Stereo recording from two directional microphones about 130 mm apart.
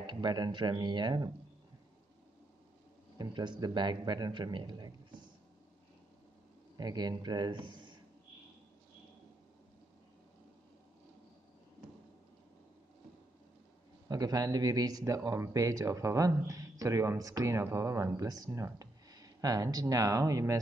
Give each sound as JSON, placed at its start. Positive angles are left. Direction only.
{"t": 0.0, "sound": "a man's voice", "side_deg": -35}
{"t": 3.2, "sound": "a man's voice", "side_deg": -35}
{"t": 6.8, "sound": "a man's voice", "side_deg": -30}
{"t": 14.0, "sound": "speech", "side_deg": -30}